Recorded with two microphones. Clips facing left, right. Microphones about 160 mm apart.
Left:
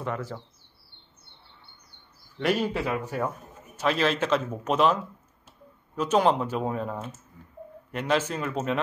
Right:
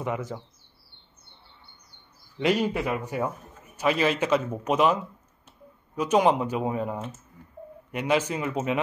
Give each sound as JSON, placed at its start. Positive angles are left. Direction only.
{"t": 0.0, "sound": "a man's voice", "side_deg": -15}
{"t": 2.3, "sound": "a man's voice", "side_deg": -15}